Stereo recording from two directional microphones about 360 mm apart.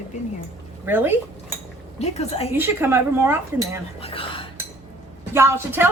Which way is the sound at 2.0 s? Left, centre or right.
Centre.